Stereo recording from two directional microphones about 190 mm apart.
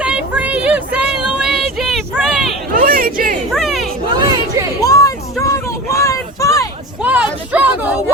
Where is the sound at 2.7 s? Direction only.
50° right (ahead or behind).